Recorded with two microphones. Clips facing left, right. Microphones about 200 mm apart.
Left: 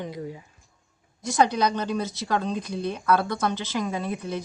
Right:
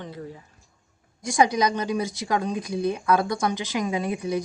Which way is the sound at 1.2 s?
15° right (ahead or behind).